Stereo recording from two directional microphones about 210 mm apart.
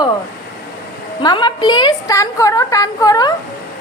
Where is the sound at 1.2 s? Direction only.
20° left (ahead or behind).